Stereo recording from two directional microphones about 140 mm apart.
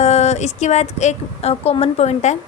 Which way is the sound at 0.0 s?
50° left (ahead or behind).